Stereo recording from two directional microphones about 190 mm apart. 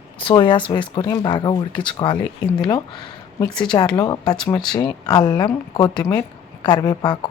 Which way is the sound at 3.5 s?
5° left (ahead or behind).